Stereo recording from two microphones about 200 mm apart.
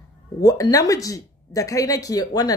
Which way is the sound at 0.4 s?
15° left (ahead or behind).